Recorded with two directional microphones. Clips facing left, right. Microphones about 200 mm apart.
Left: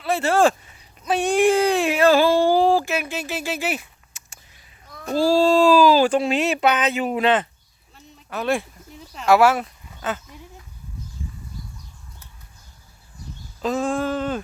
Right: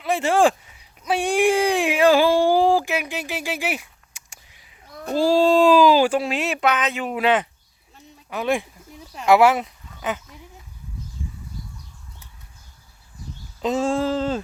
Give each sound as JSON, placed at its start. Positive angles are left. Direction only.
{"t": 0.0, "sound": "speech", "side_deg": -15}
{"t": 7.9, "sound": "a sound", "side_deg": -15}
{"t": 9.1, "sound": "speech", "side_deg": -20}
{"t": 13.6, "sound": "speech", "side_deg": -25}